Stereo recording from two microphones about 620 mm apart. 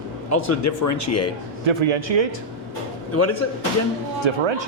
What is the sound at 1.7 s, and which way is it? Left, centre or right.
Speech, right.